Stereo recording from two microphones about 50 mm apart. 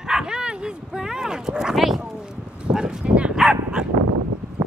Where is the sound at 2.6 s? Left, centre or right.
Centre.